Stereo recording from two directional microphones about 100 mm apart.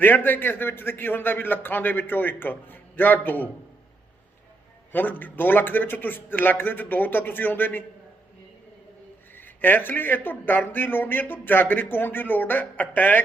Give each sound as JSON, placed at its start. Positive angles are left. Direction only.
{"t": 0.0, "sound": "speech", "side_deg": 20}
{"t": 4.9, "sound": "speech", "side_deg": 20}
{"t": 9.3, "sound": "speech", "side_deg": 20}